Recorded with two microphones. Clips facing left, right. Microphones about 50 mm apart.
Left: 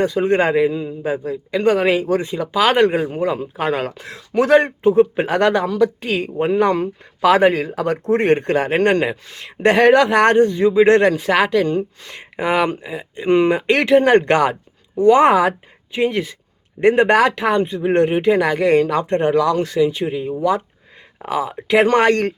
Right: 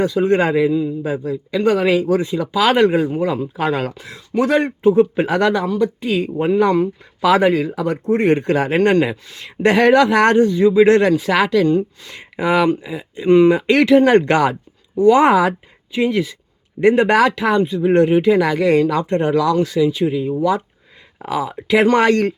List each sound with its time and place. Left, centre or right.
0.0 s speech: left
3.9 s speech: left
4.8 s speech: left
5.5 s speech: left
6.4 s speech: left
7.9 s speech: left
8.4 s speech: left